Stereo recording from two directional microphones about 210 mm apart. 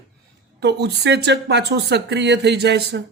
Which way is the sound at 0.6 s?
55° right (ahead or behind).